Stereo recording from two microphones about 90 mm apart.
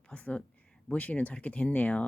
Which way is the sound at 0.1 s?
15° left (ahead or behind).